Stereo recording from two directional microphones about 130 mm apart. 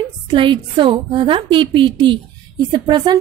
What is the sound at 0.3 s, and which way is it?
A woman's voice, 40° right (ahead or behind).